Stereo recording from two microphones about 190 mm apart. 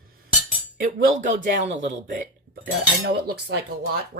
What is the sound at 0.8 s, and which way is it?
Speech, 45° right (ahead or behind).